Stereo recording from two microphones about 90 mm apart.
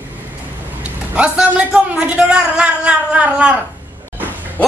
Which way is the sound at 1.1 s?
15° right (ahead or behind).